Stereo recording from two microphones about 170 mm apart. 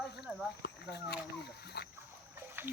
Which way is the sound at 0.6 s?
75° left (ahead or behind).